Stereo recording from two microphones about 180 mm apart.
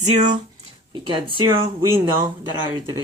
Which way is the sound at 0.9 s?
25° right (ahead or behind).